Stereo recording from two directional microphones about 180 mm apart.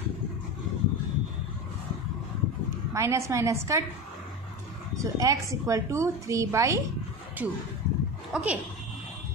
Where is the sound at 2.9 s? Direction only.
15° right (ahead or behind).